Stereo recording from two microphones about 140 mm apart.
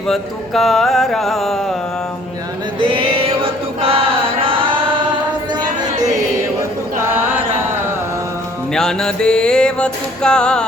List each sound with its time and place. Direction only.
0.1 s mantra: centre (ahead or behind)
2.8 s choir: 40° right (ahead or behind)
4.4 s chant: 40° right (ahead or behind)
8.7 s music: 5° left (ahead or behind)